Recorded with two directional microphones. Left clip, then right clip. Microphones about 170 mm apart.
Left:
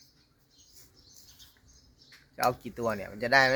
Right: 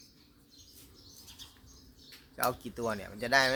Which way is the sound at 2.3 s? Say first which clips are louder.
Left 4 dB; 5° left (ahead or behind).